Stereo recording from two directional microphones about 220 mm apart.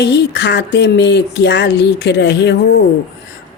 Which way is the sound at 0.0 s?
50° left (ahead or behind).